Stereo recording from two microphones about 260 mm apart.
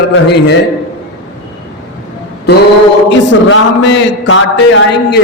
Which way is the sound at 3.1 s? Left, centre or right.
Left.